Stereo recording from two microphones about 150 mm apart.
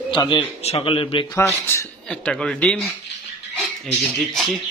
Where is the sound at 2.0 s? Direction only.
5° left (ahead or behind).